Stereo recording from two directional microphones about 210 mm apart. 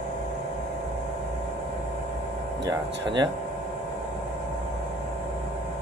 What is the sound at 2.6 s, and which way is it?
Speech, 20° right (ahead or behind).